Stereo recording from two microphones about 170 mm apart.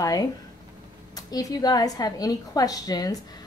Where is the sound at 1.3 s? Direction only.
20° left (ahead or behind).